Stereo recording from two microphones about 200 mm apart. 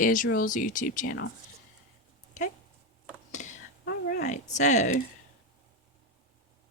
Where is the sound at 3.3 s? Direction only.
35° left (ahead or behind).